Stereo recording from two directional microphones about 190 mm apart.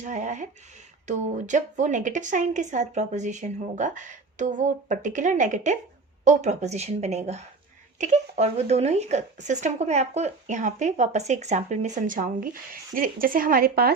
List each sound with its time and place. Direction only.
0.0 s speech: 40° right (ahead or behind)